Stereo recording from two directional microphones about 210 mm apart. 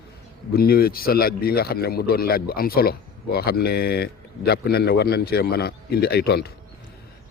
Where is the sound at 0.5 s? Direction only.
45° left (ahead or behind).